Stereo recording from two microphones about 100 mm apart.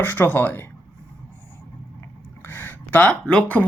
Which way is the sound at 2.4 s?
20° left (ahead or behind).